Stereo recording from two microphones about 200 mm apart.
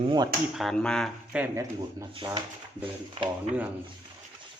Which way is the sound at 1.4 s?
15° right (ahead or behind).